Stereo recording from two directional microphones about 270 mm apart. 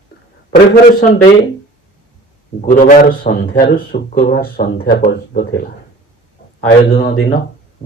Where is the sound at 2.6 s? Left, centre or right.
Left.